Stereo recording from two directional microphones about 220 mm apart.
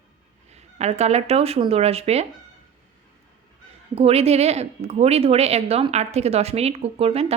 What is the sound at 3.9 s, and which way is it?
Speech, 25° right (ahead or behind).